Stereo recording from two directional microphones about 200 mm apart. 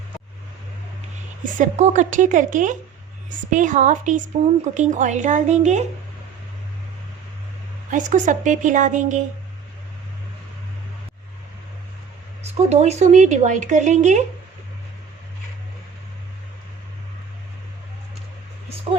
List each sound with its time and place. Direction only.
1.5 s speech: 35° right (ahead or behind)
7.9 s speech: 40° right (ahead or behind)
12.4 s speech: 35° right (ahead or behind)